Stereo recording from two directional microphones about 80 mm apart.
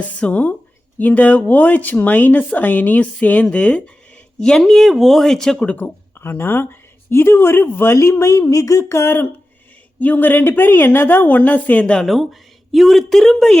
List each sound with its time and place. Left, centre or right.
0.0 s speech: centre
5.7 s speech: left
12.0 s a woman's voice: centre